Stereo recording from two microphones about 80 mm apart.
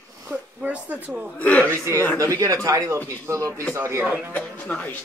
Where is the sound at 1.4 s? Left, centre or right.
Centre.